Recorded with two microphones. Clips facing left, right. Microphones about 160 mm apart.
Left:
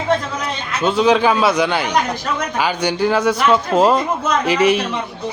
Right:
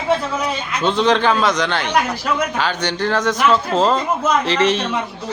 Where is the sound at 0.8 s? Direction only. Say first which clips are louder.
Left 2 dB; 5° left (ahead or behind).